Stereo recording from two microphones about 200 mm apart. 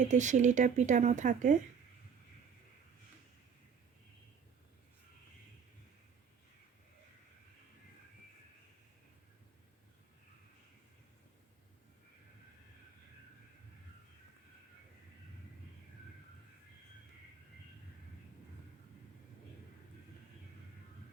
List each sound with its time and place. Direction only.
0.1 s speech: 35° right (ahead or behind)